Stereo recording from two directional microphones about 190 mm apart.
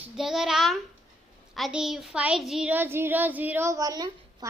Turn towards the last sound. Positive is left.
turn(degrees=-20)  # may be behind; listen again after turning